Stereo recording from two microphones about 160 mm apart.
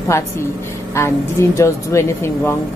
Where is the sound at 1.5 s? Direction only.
20° left (ahead or behind).